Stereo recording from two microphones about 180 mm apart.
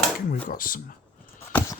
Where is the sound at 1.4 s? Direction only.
10° left (ahead or behind).